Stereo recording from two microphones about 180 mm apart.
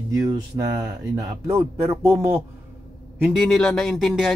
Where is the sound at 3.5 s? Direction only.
Centre (ahead or behind).